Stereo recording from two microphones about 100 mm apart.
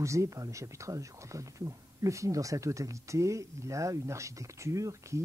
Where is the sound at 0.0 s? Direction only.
30° right (ahead or behind).